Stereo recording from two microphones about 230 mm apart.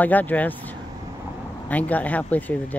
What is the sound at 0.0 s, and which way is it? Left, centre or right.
Speech, centre.